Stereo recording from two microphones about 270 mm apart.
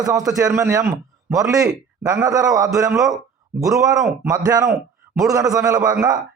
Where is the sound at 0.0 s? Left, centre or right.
Centre.